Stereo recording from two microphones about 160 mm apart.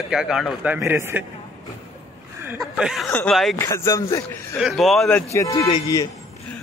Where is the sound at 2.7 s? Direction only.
Centre (ahead or behind).